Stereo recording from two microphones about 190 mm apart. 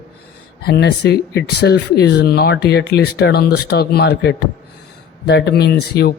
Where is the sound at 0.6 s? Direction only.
60° left (ahead or behind).